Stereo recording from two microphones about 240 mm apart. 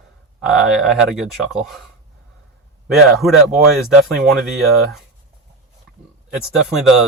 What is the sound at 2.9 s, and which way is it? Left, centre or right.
Speech, centre.